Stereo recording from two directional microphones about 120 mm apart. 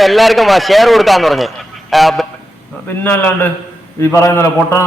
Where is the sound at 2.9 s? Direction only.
15° left (ahead or behind).